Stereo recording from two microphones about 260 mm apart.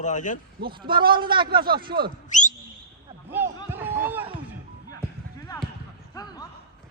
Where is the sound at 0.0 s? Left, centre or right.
Left.